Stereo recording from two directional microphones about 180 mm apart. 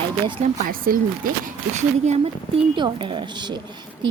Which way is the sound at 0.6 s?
50° right (ahead or behind).